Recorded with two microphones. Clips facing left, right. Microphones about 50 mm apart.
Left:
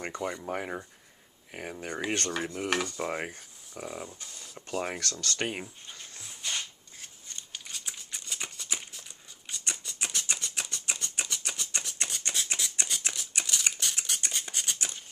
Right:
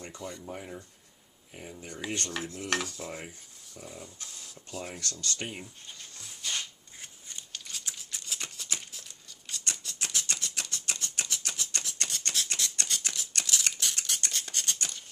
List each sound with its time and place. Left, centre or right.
0.0 s speech: left
0.4 s speech: left
2.6 s dishes: centre
3.0 s cutlery: left
3.8 s speech: left
4.2 s speech: centre
4.5 s speech: left
7.0 s shuffling cards: centre
7.5 s scissors: centre
14.2 s a sound: centre